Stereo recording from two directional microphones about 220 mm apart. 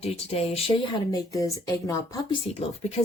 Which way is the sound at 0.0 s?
25° left (ahead or behind).